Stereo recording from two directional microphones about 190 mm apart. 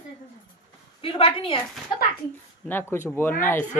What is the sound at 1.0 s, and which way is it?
Speech, 30° left (ahead or behind).